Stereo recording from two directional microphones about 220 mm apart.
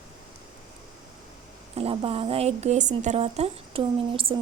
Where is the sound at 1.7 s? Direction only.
25° right (ahead or behind).